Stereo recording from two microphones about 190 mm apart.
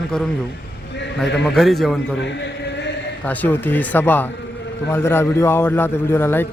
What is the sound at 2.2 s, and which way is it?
Chant, 70° left (ahead or behind).